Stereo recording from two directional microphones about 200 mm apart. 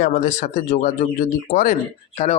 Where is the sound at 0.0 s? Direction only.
40° left (ahead or behind).